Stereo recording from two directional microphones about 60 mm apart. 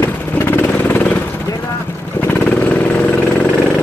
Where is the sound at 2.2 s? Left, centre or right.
Left.